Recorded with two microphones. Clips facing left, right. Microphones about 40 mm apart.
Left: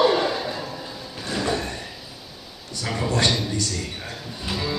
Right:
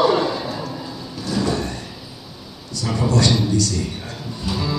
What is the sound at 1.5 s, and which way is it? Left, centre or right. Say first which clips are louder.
Sliding door: right 2 dB; left.